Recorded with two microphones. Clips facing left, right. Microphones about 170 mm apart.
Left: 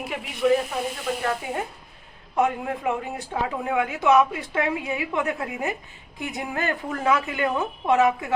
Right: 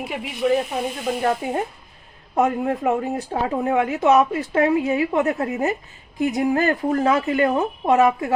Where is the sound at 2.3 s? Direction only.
35° right (ahead or behind).